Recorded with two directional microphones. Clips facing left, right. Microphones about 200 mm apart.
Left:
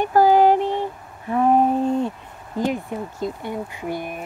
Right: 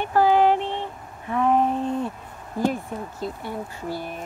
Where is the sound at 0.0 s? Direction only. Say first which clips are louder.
Left 3 dB; 40° left (ahead or behind).